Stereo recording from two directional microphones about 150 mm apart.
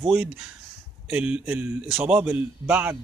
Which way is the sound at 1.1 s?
10° right (ahead or behind).